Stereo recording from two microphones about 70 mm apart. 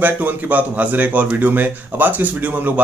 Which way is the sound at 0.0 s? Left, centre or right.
Right.